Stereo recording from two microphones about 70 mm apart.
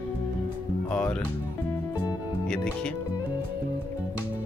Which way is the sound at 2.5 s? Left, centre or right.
Centre.